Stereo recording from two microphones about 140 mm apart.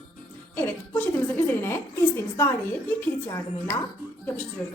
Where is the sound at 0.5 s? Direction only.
15° left (ahead or behind).